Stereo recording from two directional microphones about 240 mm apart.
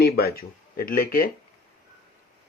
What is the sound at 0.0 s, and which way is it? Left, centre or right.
Speech, left.